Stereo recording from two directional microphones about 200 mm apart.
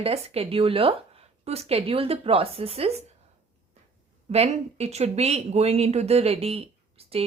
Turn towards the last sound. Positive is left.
turn(degrees=-30)  # may be behind; listen again after turning